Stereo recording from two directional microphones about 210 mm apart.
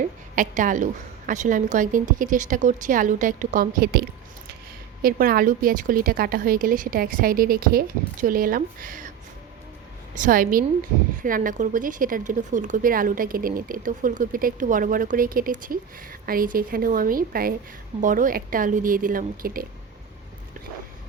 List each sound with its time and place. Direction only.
0.3 s speech: 40° right (ahead or behind)
5.0 s a woman's voice: 45° right (ahead or behind)
10.2 s a woman's voice: 40° right (ahead or behind)